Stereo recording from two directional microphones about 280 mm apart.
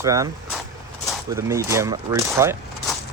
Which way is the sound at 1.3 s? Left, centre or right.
Centre.